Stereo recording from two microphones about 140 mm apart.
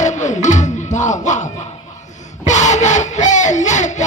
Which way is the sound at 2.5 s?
60° left (ahead or behind).